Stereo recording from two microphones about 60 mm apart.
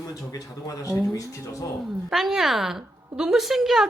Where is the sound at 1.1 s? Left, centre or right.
Left.